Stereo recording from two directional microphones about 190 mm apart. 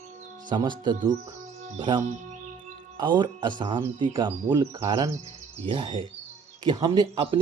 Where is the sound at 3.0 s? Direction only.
25° right (ahead or behind).